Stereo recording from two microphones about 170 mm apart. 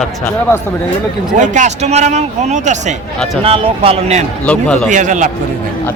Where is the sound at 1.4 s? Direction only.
45° right (ahead or behind).